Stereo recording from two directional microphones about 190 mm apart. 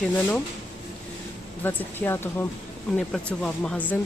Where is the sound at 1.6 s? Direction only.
10° left (ahead or behind).